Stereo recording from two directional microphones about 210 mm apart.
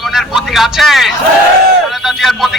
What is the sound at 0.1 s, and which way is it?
Vehicle, centre (ahead or behind).